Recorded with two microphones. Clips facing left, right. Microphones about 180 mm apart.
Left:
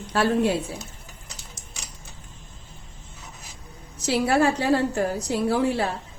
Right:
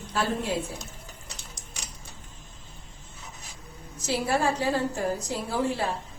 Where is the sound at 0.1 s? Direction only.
70° left (ahead or behind).